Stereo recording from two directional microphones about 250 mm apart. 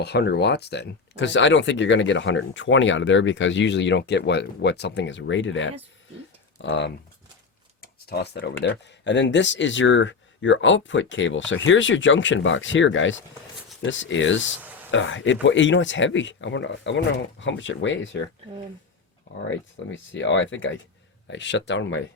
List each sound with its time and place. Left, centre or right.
0.0 s speech: left
7.8 s a sound: left
8.6 s speech: left
19.5 s speech: left